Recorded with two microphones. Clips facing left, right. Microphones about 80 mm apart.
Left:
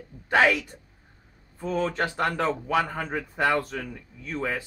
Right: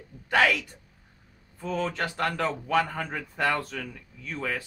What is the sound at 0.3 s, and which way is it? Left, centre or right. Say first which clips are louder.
Speech: left 2 dB; centre.